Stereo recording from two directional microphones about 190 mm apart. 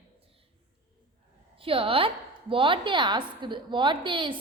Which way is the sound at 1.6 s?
30° right (ahead or behind).